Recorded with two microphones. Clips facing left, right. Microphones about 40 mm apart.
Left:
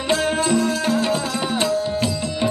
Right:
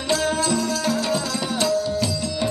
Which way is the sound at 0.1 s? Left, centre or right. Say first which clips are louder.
Left 2 dB; left.